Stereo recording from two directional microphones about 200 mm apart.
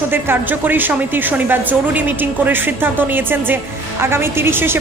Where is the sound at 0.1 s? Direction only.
10° right (ahead or behind).